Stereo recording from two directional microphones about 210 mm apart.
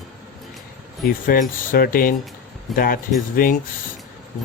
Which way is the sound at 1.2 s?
40° left (ahead or behind).